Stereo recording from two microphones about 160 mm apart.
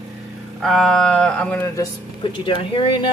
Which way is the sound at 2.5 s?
30° left (ahead or behind).